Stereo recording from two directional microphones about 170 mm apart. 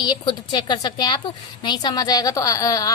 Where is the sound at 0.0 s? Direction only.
25° left (ahead or behind).